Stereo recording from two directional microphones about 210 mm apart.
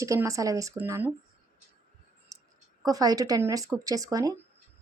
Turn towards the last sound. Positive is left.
turn(degrees=-15)  # may be behind; listen again after turning